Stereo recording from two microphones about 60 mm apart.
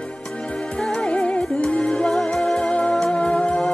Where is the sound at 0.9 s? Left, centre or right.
Centre.